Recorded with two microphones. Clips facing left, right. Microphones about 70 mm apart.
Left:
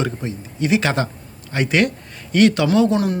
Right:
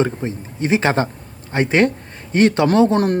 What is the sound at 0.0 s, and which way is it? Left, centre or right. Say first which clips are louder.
Speech: right 4 dB; right.